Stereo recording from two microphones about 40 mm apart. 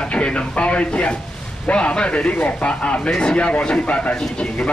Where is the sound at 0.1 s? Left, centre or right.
Left.